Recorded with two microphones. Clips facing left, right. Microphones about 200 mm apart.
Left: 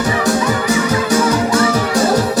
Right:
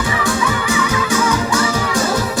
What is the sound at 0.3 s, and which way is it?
Music, 40° left (ahead or behind).